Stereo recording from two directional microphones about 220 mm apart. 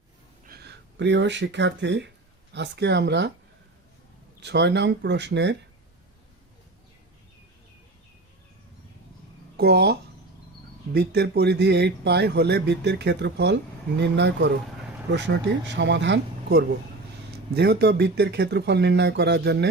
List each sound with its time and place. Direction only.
0.4 s speech: 45° right (ahead or behind)
4.4 s speech: 50° right (ahead or behind)
9.6 s speech: 45° right (ahead or behind)